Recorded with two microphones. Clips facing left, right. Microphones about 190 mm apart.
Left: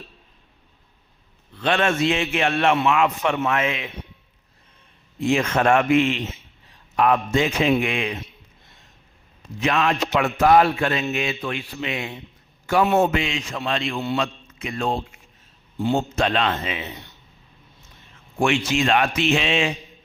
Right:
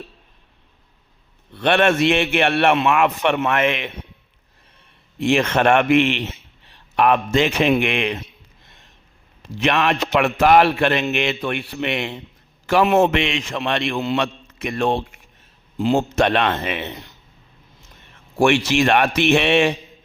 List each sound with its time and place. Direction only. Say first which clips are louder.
1.5 s a man's voice: right 4 dB; 65° right (ahead or behind)
5.2 s a man's voice: right 3 dB; 70° right (ahead or behind)
9.6 s a man's voice: right 2 dB; 70° right (ahead or behind)
12.6 s a man's voice: right 3 dB; 90° right; by 16.9 s 65° right (ahead or behind)
18.3 s a man's voice: right 4 dB; 70° right (ahead or behind)